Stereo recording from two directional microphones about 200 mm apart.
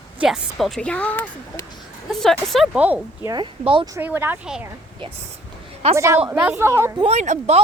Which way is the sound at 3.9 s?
10° right (ahead or behind).